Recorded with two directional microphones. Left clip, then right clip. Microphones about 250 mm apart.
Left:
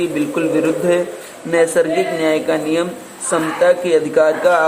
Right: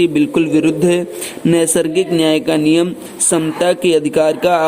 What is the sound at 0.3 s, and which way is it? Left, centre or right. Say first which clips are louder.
A man's voice: right 2 dB; right.